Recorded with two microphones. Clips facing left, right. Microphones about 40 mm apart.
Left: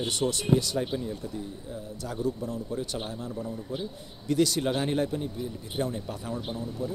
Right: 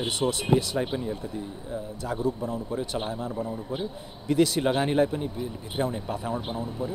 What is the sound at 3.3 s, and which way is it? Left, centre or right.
Speech, right.